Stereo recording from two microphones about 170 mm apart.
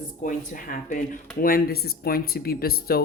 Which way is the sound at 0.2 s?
50° left (ahead or behind).